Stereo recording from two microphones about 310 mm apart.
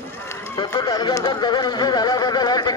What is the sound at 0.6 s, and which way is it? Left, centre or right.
Speech, centre.